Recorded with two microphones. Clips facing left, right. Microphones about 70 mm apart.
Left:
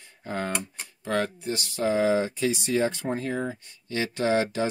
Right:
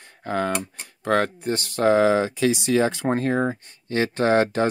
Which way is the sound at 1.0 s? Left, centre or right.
Right.